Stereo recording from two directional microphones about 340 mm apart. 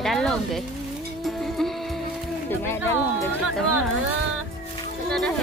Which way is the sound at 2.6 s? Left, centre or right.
Centre.